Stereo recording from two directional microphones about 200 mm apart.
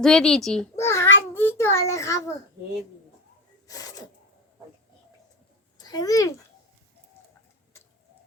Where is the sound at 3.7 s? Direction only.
20° left (ahead or behind).